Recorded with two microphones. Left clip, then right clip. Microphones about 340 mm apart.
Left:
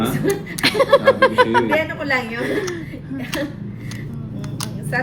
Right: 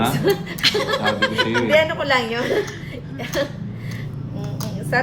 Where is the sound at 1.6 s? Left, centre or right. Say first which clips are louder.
Right 3 dB; right.